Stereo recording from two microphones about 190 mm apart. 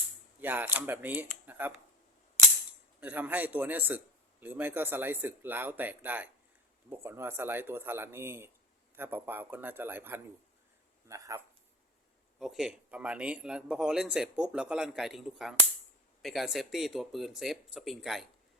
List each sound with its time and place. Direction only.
0.4 s a man's voice: 10° right (ahead or behind)
3.0 s a man's voice: 10° right (ahead or behind)
12.4 s a man's voice: centre (ahead or behind)